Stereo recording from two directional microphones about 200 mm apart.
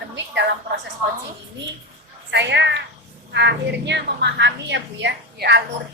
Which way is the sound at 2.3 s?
60° right (ahead or behind).